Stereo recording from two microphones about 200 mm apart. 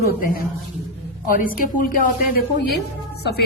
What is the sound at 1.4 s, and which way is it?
A woman's voice, 40° left (ahead or behind).